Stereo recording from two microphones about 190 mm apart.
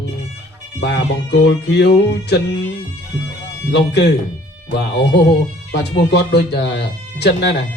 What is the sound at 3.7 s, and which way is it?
Speech, 65° left (ahead or behind).